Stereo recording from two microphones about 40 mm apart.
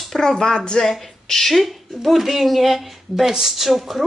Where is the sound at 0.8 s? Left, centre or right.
Centre.